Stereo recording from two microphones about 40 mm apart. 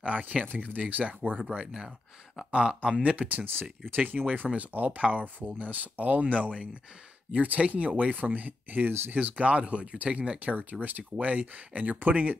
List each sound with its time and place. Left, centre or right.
0.0 s speech: right
0.5 s speech: right
2.5 s speech: right
3.0 s speech: right
9.1 s speech: right
10.5 s speech: right